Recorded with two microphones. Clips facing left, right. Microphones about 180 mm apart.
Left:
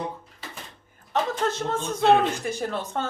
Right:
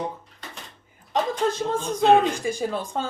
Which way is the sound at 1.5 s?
10° right (ahead or behind).